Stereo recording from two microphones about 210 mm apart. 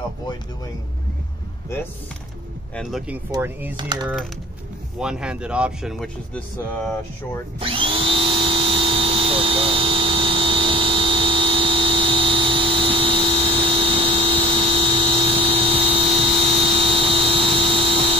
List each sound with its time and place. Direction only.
2.7 s speech: centre (ahead or behind); by 4.1 s 20° right (ahead or behind)
4.9 s speech: 5° right (ahead or behind)
7.6 s a sound: 25° right (ahead or behind)